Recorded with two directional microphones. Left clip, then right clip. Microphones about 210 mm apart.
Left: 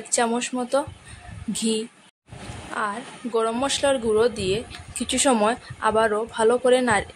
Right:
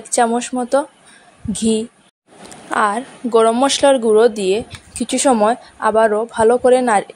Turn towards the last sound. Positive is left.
turn(degrees=-15)  # may be behind; listen again after turning